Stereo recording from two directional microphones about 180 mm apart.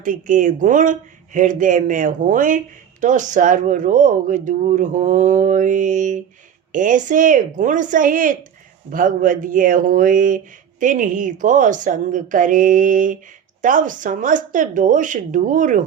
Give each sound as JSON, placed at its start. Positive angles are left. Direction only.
{"t": 0.0, "sound": "speech", "side_deg": -45}